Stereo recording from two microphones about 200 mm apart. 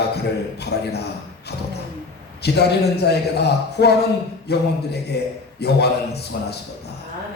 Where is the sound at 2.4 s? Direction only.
55° left (ahead or behind).